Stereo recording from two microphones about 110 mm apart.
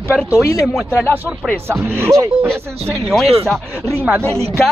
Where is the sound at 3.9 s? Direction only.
20° right (ahead or behind).